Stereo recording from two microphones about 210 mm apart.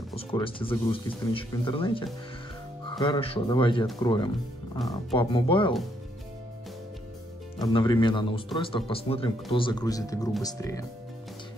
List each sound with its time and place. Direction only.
0.1 s speech: 25° left (ahead or behind)
7.6 s speech: 20° left (ahead or behind)